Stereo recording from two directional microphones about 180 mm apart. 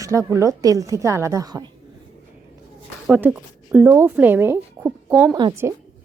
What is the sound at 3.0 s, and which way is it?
Speech, 5° right (ahead or behind).